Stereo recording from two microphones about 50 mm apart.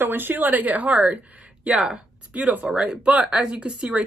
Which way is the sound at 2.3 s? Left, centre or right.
Right.